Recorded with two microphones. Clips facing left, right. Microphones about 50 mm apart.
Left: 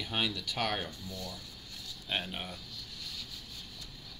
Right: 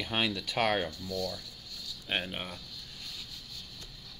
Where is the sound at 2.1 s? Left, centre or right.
Right.